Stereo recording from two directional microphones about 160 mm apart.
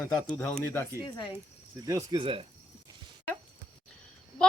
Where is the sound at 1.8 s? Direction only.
25° right (ahead or behind).